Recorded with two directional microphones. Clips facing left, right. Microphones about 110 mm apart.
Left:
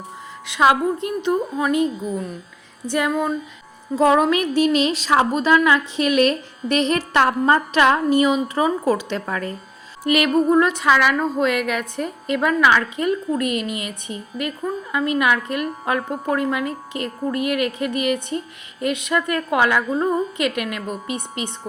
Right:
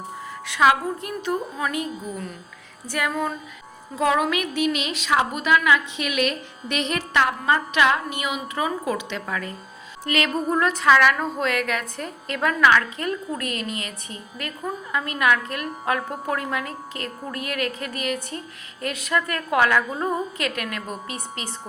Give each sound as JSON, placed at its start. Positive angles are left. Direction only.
{"t": 0.4, "sound": "speech", "side_deg": 25}
{"t": 3.9, "sound": "a woman's voice", "side_deg": 30}
{"t": 10.1, "sound": "music", "side_deg": 10}
{"t": 10.8, "sound": "a woman's voice", "side_deg": 10}